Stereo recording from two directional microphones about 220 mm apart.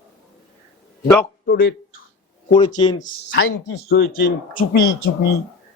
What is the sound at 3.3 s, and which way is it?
Speech, 60° left (ahead or behind).